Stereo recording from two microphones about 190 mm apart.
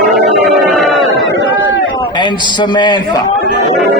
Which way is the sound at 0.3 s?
Centre (ahead or behind).